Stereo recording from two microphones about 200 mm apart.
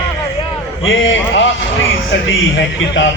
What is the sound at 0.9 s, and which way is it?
A man's voice, 65° left (ahead or behind).